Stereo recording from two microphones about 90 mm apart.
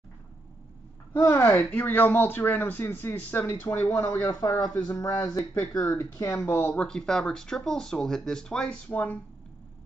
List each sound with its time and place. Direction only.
1.1 s a man's voice: 25° left (ahead or behind)
4.1 s speech: 40° left (ahead or behind)
4.9 s speech: 30° left (ahead or behind); by 9.2 s 15° left (ahead or behind)